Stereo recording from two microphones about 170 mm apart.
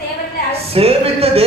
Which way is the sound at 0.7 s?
35° right (ahead or behind).